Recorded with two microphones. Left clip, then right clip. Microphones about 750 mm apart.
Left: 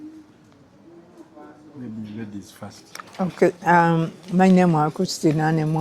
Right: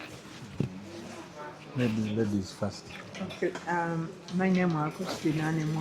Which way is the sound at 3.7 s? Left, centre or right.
Left.